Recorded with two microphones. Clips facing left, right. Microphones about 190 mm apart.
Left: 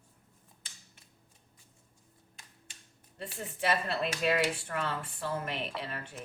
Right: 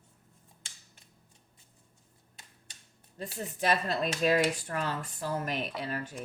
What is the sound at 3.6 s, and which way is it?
Speech, 40° right (ahead or behind).